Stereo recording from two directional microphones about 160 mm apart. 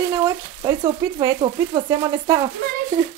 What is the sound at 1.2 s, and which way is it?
Speech, 25° right (ahead or behind).